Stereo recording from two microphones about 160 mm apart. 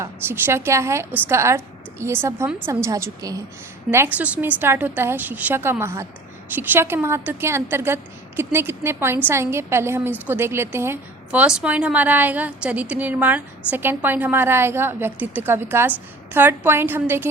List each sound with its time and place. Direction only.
0.0 s a woman's voice: 15° right (ahead or behind)